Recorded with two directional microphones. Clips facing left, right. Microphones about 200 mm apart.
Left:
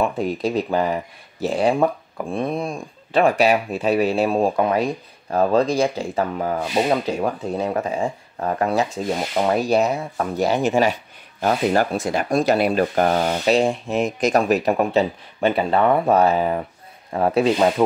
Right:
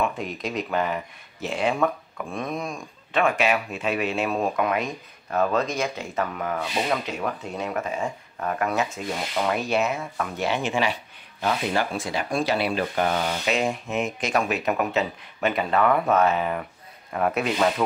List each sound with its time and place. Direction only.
0.0 s speech: 35° left (ahead or behind)